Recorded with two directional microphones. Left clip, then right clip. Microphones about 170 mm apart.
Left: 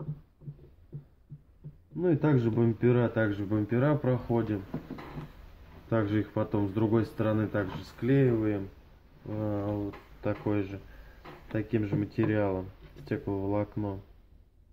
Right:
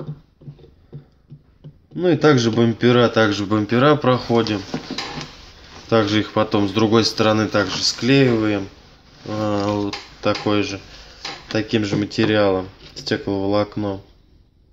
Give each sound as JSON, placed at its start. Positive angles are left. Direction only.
{"t": 2.0, "sound": "speech", "side_deg": -15}
{"t": 5.9, "sound": "speech", "side_deg": -15}